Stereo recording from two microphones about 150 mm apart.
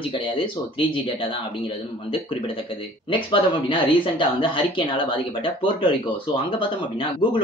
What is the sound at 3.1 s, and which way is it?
Speech, 35° left (ahead or behind).